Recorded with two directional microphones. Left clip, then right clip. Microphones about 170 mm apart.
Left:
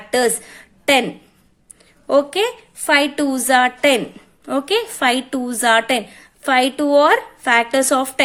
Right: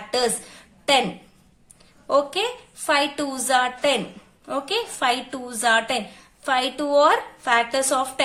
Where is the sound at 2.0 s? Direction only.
40° left (ahead or behind).